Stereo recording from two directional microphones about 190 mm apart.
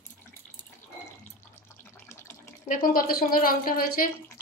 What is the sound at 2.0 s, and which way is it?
Water, 15° left (ahead or behind).